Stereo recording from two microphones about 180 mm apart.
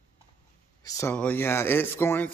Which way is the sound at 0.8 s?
20° left (ahead or behind).